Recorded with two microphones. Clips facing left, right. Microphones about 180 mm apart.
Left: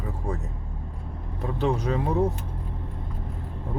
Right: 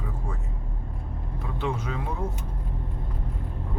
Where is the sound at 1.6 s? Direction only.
35° left (ahead or behind).